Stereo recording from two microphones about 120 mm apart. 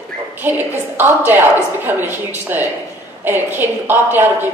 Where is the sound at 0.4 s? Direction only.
15° right (ahead or behind).